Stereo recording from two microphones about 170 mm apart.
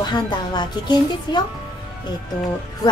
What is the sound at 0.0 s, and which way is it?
A child's voice, 25° left (ahead or behind).